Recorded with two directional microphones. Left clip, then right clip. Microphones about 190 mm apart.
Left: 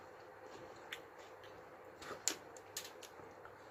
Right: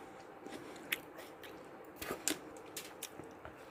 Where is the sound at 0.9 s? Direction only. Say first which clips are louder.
Right 11 dB; 45° right (ahead or behind).